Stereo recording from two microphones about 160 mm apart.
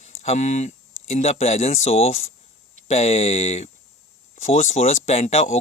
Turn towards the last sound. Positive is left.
turn(degrees=40)  # may be behind; listen again after turning